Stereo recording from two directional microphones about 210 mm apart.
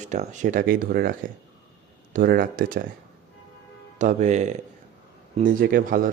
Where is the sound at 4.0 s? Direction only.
35° right (ahead or behind).